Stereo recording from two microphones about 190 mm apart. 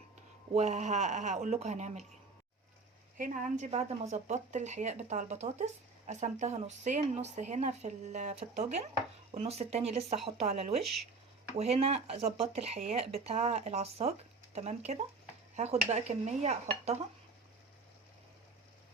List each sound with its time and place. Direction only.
0.5 s speech: 35° right (ahead or behind)
3.2 s speech: 45° right (ahead or behind)